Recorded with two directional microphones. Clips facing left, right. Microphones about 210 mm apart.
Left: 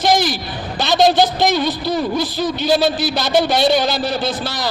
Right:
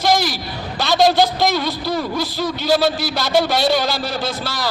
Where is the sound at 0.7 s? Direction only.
20° left (ahead or behind).